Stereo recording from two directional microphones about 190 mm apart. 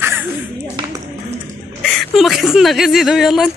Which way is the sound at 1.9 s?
Centre (ahead or behind).